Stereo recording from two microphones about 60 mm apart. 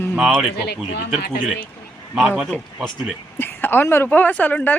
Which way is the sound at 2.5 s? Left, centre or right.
Left.